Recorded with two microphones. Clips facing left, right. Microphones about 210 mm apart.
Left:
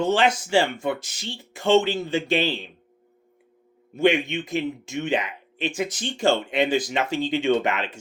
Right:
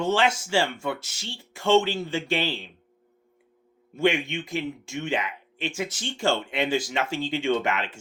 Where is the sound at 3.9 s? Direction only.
20° left (ahead or behind).